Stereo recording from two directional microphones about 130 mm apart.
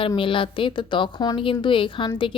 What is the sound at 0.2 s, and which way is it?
Speech, 40° left (ahead or behind).